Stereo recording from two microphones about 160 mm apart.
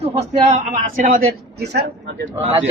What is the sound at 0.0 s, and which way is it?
Speech, 40° right (ahead or behind).